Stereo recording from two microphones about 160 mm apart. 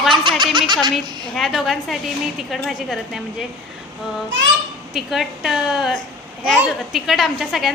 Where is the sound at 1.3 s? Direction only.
Centre (ahead or behind).